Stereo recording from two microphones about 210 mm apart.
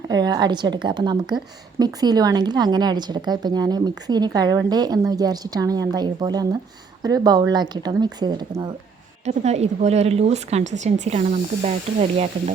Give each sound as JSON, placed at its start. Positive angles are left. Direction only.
{"t": 0.1, "sound": "a woman's voice", "side_deg": -20}
{"t": 9.2, "sound": "speech", "side_deg": -30}